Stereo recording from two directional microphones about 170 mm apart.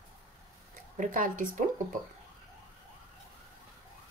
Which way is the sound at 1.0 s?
50° right (ahead or behind).